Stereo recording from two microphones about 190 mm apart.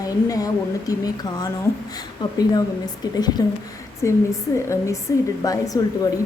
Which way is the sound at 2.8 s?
20° left (ahead or behind).